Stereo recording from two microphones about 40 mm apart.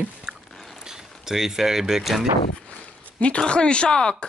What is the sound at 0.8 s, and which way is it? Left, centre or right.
Speech, centre.